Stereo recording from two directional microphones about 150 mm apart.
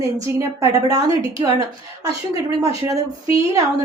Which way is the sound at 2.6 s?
20° right (ahead or behind).